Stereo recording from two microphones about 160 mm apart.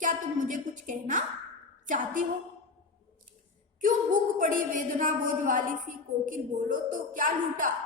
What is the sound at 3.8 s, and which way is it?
A woman's voice, 55° right (ahead or behind).